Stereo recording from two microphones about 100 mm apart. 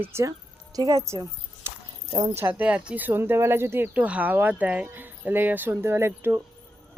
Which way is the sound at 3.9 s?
10° right (ahead or behind).